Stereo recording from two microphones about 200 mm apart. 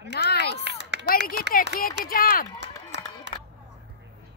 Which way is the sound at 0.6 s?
60° right (ahead or behind).